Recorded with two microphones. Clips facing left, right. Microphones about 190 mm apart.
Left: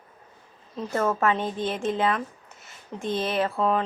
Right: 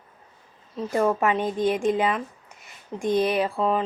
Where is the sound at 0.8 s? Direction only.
15° right (ahead or behind).